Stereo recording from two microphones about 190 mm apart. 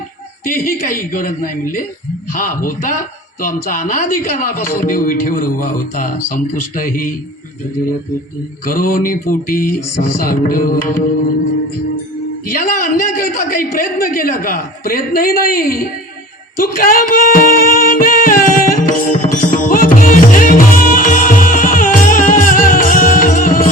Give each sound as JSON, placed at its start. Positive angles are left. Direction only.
{"t": 0.4, "sound": "a man's voice", "side_deg": 45}
{"t": 8.6, "sound": "a man's voice", "side_deg": 45}
{"t": 12.5, "sound": "a man's voice", "side_deg": 45}
{"t": 16.6, "sound": "music", "side_deg": 50}